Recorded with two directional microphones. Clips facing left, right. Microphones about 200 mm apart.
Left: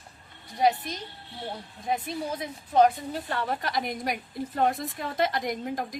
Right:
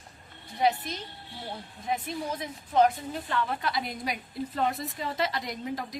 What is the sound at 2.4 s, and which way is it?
A woman's voice, 35° left (ahead or behind).